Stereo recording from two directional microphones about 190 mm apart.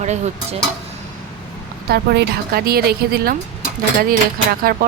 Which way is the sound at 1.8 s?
60° right (ahead or behind).